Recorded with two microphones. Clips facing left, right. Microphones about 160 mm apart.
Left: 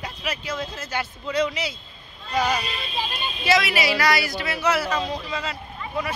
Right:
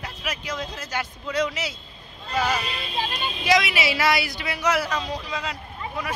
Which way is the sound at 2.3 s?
10° left (ahead or behind).